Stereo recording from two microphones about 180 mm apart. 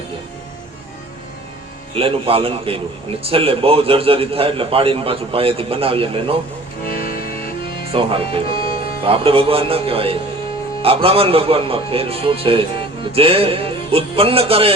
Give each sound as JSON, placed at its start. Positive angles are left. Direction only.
{"t": 2.0, "sound": "a man's voice", "side_deg": -30}
{"t": 6.8, "sound": "music", "side_deg": 55}
{"t": 7.9, "sound": "a man's voice", "side_deg": -30}